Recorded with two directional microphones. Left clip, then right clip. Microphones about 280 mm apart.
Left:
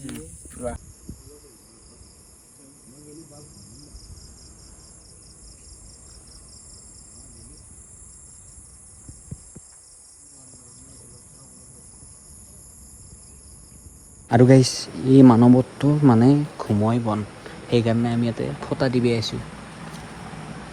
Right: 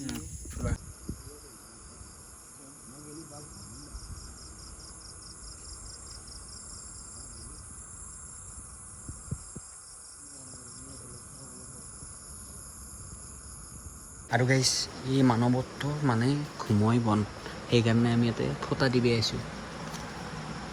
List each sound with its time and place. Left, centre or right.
14.3 s speech: left
14.8 s speech: centre
15.3 s speech: left
16.2 s speech: centre